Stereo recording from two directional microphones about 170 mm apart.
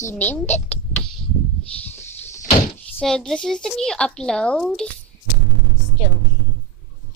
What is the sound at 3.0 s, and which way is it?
Speech, 5° left (ahead or behind).